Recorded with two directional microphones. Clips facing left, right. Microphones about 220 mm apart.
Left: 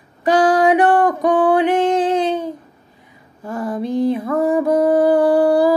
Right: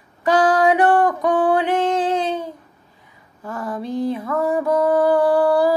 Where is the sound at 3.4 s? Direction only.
30° left (ahead or behind).